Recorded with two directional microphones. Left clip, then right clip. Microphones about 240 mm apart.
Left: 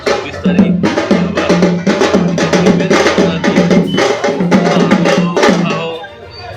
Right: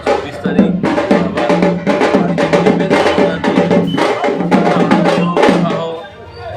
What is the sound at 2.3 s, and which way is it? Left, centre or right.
Music, left.